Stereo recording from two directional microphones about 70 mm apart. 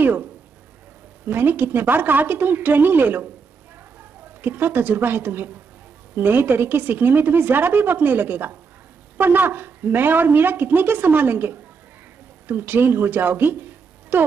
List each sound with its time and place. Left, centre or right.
0.0 s speech: right
1.3 s a woman's voice: right
4.4 s a woman's voice: right